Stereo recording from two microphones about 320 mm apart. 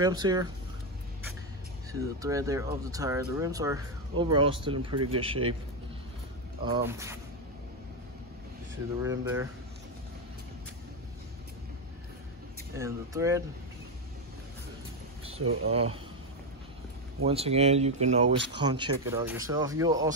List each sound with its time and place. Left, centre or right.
0.0 s speech: centre
1.9 s speech: centre
6.6 s speech: centre
9.0 s speech: centre
12.7 s speech: centre
15.4 s speech: right
17.2 s speech: centre